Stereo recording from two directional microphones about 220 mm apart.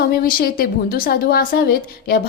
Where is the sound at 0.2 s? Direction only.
40° left (ahead or behind).